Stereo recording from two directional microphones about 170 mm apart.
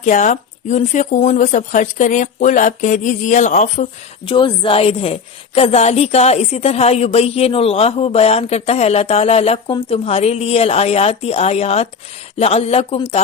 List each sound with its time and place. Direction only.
0.0 s speech: 45° left (ahead or behind)
4.3 s a woman's voice: 30° left (ahead or behind)